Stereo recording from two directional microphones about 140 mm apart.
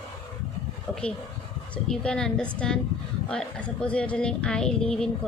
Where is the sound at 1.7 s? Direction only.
5° left (ahead or behind).